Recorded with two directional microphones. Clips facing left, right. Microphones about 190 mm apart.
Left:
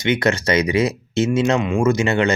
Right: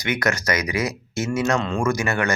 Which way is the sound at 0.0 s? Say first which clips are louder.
Left 5 dB; 25° left (ahead or behind).